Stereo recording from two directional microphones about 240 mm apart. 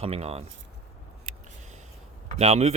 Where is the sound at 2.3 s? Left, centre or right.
Right.